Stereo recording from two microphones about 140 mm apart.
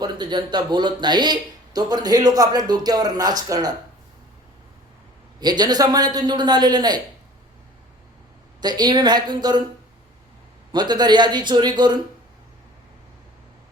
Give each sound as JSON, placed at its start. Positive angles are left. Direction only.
{"t": 0.0, "sound": "speech", "side_deg": -30}
{"t": 5.4, "sound": "speech", "side_deg": -30}
{"t": 8.6, "sound": "a man's voice", "side_deg": -30}
{"t": 10.7, "sound": "a man's voice", "side_deg": -30}